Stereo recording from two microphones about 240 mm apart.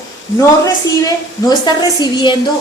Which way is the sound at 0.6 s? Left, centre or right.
Centre.